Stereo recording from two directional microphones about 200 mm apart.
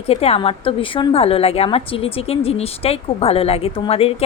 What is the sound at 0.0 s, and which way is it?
A woman's voice, 30° left (ahead or behind).